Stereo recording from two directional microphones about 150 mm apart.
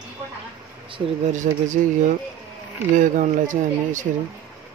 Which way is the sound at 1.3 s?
55° right (ahead or behind).